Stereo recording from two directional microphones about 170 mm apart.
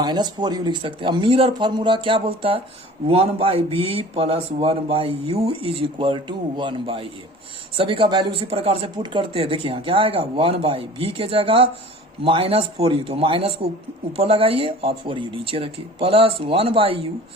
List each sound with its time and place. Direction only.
0.0 s speech: 25° right (ahead or behind)